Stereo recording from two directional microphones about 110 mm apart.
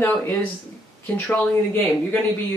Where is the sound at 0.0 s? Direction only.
20° left (ahead or behind).